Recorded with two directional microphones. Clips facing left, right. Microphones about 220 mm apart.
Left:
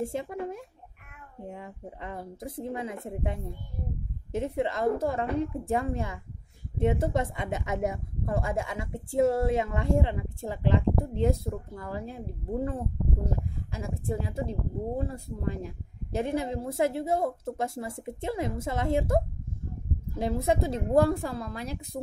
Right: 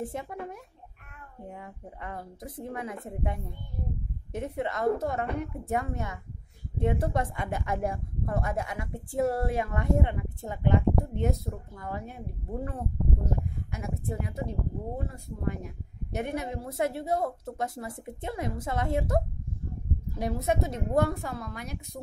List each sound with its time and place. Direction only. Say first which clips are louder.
0.0 s speech: left 4 dB; 25° left (ahead or behind)
13.7 s a woman's voice: left 4 dB; 30° left (ahead or behind)